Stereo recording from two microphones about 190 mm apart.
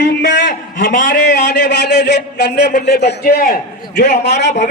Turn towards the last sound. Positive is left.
turn(degrees=65)  # may be behind; listen again after turning